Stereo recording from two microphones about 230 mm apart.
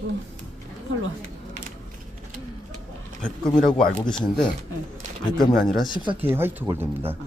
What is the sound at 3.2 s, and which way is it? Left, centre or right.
Speech, centre.